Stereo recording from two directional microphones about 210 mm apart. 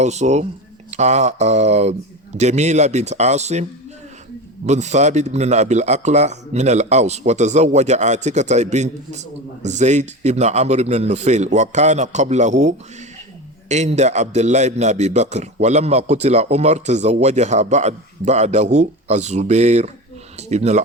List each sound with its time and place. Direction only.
0.0 s a man's voice: 35° right (ahead or behind)